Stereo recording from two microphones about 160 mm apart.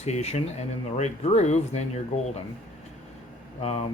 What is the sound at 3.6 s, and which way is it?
Speech, 40° left (ahead or behind).